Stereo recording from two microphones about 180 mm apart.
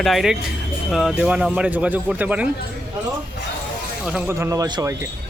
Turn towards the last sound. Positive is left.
turn(degrees=-20)  # may be behind; listen again after turning